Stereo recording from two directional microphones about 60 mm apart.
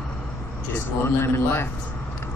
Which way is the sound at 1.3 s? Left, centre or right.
Left.